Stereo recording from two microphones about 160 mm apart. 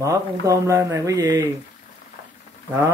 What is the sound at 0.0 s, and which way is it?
A man's voice, 20° right (ahead or behind).